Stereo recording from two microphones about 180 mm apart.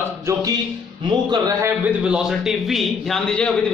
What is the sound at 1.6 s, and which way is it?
A man's voice, 5° right (ahead or behind).